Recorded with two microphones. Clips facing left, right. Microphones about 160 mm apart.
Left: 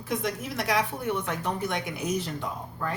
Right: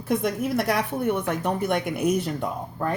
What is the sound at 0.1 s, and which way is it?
A woman's voice, 55° right (ahead or behind).